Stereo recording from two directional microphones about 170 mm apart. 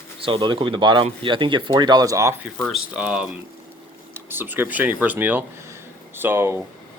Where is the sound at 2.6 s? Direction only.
5° left (ahead or behind).